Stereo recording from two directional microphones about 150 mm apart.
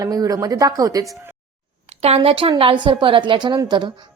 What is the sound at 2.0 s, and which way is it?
A woman's voice, 40° right (ahead or behind).